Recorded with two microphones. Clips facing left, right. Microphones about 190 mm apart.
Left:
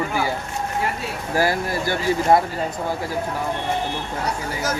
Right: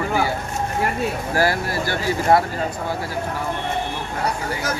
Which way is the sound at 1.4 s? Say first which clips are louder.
Left 1 dB; 20° left (ahead or behind).